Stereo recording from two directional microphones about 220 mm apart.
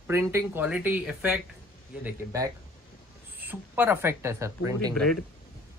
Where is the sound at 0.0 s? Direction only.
10° right (ahead or behind).